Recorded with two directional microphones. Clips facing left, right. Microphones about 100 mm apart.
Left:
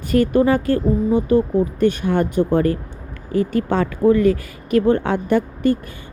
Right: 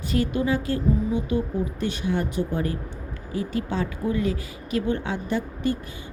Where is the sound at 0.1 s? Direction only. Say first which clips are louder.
Left 9 dB; 50° left (ahead or behind).